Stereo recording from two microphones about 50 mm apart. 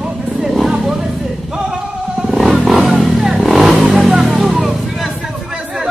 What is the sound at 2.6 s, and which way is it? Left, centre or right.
Vehicle, centre.